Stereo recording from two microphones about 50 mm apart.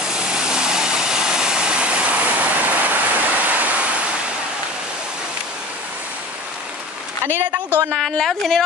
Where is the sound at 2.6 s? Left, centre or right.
Right.